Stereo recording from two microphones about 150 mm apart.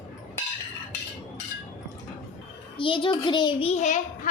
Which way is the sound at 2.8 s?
35° left (ahead or behind).